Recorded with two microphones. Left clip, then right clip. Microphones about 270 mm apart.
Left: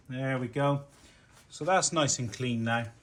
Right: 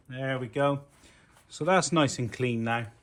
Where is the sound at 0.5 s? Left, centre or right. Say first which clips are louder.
Right 4 dB; right.